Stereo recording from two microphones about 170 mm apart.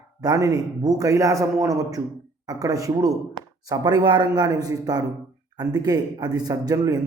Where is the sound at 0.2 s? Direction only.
20° right (ahead or behind).